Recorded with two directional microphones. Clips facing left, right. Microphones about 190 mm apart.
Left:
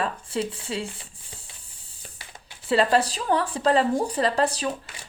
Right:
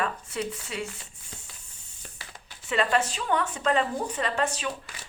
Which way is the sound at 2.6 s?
35° left (ahead or behind).